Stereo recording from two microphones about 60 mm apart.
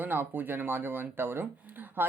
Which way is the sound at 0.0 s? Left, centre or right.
Right.